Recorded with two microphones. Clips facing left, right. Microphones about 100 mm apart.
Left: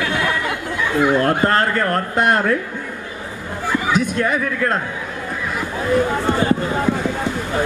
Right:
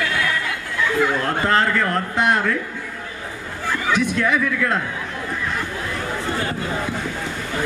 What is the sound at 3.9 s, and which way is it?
Speech, 45° left (ahead or behind).